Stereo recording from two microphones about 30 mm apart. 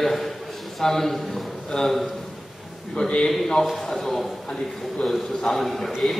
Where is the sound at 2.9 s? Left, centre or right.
Left.